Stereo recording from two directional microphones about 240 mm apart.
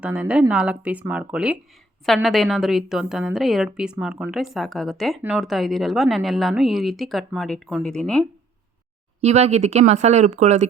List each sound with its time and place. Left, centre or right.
0.0 s a woman's voice: centre
9.2 s speech: right